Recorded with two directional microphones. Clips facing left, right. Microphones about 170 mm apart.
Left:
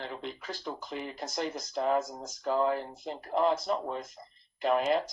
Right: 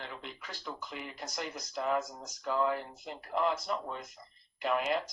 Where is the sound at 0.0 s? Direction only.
35° left (ahead or behind).